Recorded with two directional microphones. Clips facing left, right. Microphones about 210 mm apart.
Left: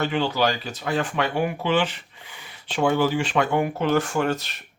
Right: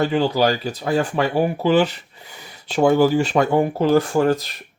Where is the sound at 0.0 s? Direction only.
40° right (ahead or behind).